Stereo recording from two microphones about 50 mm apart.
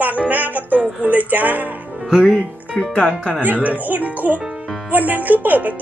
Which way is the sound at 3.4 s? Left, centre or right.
Right.